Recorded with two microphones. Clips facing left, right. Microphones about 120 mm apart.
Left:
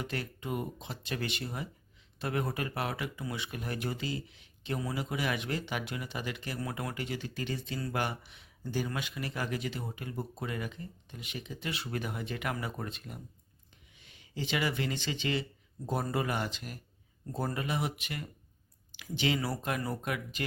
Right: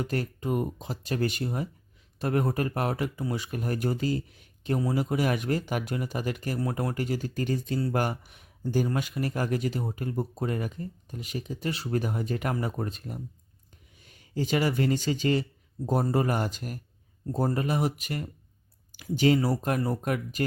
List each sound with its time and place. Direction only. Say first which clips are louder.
0.0 s speech: right 7 dB; 45° right (ahead or behind)